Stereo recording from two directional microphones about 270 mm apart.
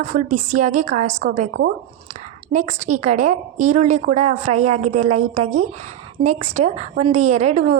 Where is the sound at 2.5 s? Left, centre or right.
Right.